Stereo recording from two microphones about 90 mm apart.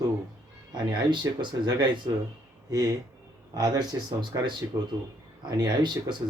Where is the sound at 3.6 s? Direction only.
50° right (ahead or behind).